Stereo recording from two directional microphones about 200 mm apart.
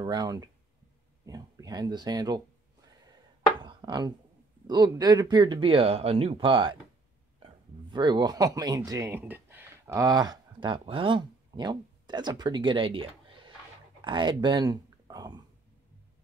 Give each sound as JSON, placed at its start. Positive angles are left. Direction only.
{"t": 0.0, "sound": "speech", "side_deg": -20}
{"t": 3.6, "sound": "a sound", "side_deg": -20}
{"t": 4.6, "sound": "speech", "side_deg": -20}
{"t": 7.9, "sound": "speech", "side_deg": -20}